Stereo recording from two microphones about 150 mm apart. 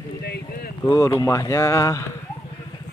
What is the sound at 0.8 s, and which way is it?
Speech, 25° left (ahead or behind).